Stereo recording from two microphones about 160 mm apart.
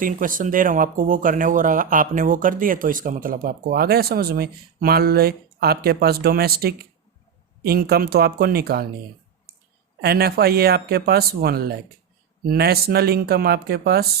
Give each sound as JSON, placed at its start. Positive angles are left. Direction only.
{"t": 0.0, "sound": "speech", "side_deg": -60}
{"t": 10.0, "sound": "speech", "side_deg": -75}